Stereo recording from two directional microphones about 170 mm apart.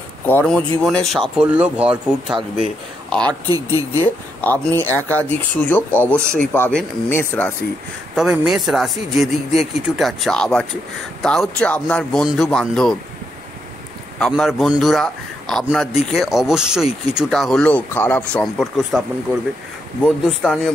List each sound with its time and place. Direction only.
0.3 s speech: 10° left (ahead or behind)
3.3 s speech: 25° right (ahead or behind)
4.4 s speech: 10° left (ahead or behind)
8.1 s speech: centre (ahead or behind)
14.2 s speech: centre (ahead or behind)